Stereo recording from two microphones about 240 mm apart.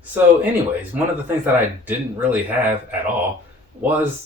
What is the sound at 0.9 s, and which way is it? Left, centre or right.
Speech, centre.